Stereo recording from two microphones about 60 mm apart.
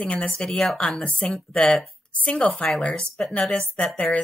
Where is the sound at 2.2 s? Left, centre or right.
Left.